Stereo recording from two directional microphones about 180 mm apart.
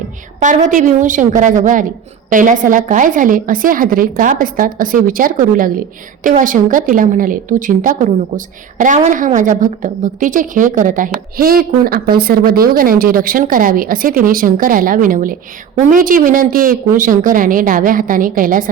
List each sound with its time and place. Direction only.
0.4 s a woman's voice: 45° right (ahead or behind)